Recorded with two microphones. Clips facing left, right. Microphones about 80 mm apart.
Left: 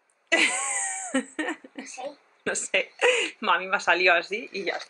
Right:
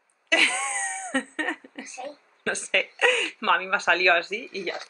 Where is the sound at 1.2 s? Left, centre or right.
Centre.